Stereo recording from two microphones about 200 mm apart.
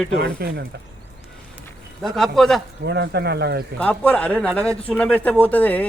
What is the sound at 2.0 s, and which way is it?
Speech, centre (ahead or behind).